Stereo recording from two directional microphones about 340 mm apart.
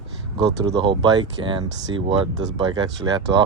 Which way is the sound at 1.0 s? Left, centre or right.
Centre.